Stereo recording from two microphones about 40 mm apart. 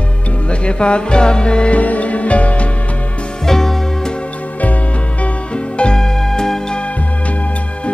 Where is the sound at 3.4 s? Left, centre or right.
Centre.